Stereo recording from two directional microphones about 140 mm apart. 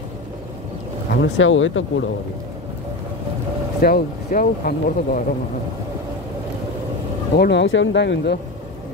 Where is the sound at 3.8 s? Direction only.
90° left.